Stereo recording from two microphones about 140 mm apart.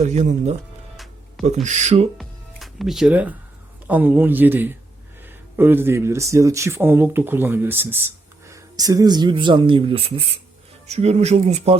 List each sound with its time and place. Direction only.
0.0 s speech: 55° right (ahead or behind)
1.6 s speech: 55° right (ahead or behind)
2.1 s music: centre (ahead or behind)
3.8 s speech: 10° right (ahead or behind); by 11.8 s 50° right (ahead or behind)